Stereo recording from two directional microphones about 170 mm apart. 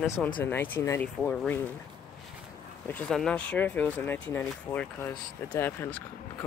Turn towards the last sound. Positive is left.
turn(degrees=10)  # may be behind; listen again after turning